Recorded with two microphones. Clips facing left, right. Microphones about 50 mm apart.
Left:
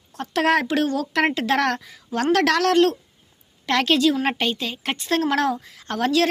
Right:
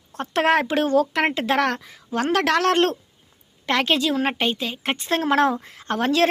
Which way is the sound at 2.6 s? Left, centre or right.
Right.